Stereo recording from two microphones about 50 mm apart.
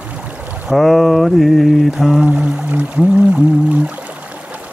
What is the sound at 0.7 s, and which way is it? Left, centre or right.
Speech, centre.